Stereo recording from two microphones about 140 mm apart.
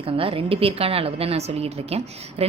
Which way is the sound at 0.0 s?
40° right (ahead or behind).